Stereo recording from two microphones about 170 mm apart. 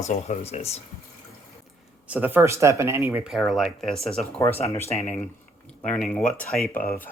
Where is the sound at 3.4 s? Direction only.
Centre (ahead or behind).